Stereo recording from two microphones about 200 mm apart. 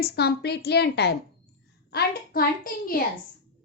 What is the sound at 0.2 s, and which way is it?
A woman's voice, 55° left (ahead or behind).